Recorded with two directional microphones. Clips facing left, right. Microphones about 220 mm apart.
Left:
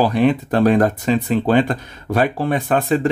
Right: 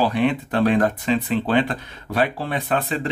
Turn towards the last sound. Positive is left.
turn(degrees=45)  # may be behind; listen again after turning